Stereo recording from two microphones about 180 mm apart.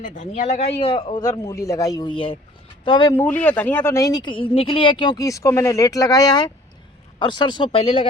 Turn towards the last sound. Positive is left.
turn(degrees=25)  # may be behind; listen again after turning